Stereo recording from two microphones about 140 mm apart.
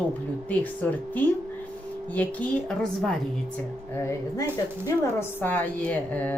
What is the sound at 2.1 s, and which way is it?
A woman's voice, 5° left (ahead or behind).